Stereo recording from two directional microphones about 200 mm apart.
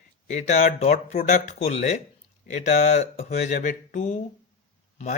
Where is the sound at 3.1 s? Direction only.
40° left (ahead or behind).